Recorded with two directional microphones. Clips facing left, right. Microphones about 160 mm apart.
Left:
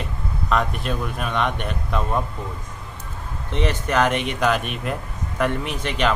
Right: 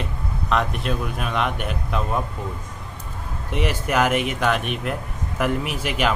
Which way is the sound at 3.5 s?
10° right (ahead or behind).